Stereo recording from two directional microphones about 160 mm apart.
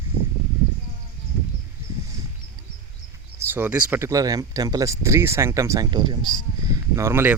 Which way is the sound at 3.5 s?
10° right (ahead or behind).